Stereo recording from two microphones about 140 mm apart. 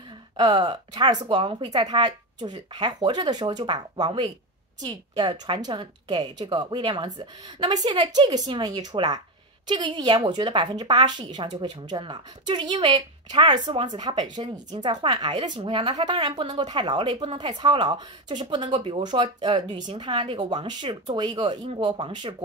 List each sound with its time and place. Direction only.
0.4 s speech: 35° right (ahead or behind)